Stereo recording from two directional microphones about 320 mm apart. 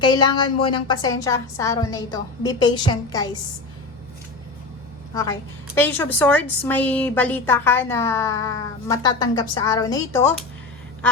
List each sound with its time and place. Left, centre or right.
0.0 s a woman's voice: centre
5.7 s a woman's voice: centre